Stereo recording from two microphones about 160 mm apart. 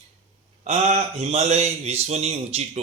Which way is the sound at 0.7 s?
40° right (ahead or behind).